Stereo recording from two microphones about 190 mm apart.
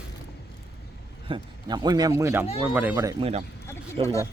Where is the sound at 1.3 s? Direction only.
20° right (ahead or behind).